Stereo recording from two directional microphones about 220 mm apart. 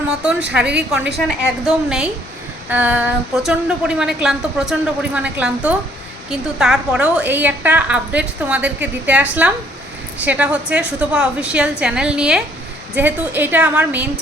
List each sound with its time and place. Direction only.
0.1 s a woman's voice: 5° right (ahead or behind)